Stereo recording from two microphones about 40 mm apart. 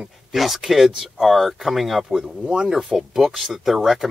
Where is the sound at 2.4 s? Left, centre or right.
Right.